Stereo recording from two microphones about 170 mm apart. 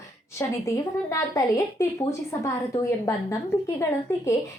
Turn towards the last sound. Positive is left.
turn(degrees=15)  # may be behind; listen again after turning